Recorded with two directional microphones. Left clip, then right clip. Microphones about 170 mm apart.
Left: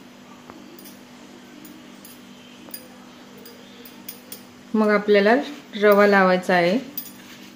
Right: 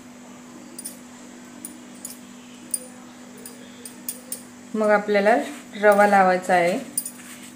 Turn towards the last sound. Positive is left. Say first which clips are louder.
# even
turn(degrees=60)  # may be behind; listen again after turning